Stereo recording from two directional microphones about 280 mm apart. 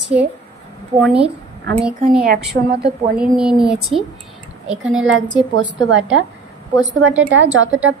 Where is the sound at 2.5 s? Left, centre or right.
Right.